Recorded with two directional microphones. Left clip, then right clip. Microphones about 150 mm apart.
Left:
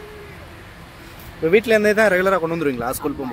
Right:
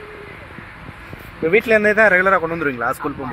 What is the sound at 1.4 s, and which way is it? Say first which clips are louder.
Speech: right 1 dB; 40° left (ahead or behind).